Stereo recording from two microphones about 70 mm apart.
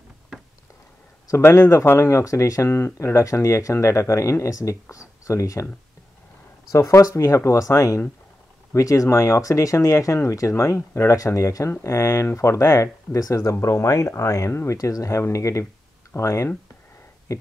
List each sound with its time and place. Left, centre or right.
1.4 s speech: left
6.7 s speech: left